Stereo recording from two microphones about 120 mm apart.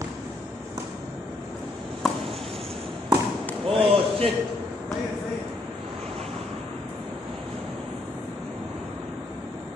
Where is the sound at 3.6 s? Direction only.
55° right (ahead or behind).